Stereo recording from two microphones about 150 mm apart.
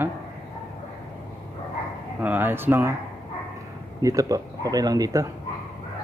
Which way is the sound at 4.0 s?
25° right (ahead or behind).